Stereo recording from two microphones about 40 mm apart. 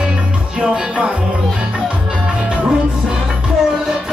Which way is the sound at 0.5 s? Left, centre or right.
Right.